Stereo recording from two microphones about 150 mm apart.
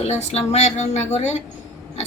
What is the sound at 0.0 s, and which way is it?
A woman's voice, 45° left (ahead or behind).